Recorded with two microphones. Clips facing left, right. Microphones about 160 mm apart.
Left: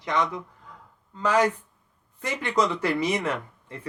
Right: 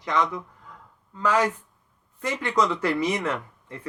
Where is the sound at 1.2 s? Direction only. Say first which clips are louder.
Left 1 dB; 15° left (ahead or behind).